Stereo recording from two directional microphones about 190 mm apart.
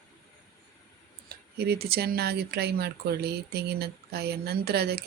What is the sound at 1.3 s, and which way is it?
Speech, 55° right (ahead or behind).